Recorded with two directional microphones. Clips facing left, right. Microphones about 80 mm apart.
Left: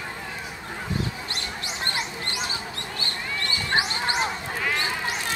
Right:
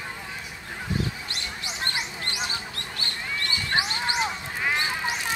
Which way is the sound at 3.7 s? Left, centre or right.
Left.